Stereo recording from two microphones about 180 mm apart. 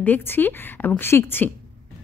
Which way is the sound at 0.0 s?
10° left (ahead or behind).